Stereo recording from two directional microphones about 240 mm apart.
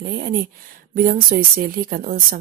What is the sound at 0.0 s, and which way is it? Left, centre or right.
Speech, right.